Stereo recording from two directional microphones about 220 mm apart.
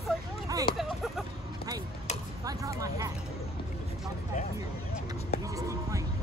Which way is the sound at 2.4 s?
15° right (ahead or behind).